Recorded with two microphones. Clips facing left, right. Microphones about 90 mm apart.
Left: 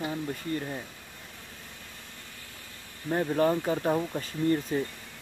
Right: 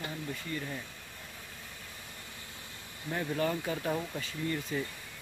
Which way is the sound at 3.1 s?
35° left (ahead or behind).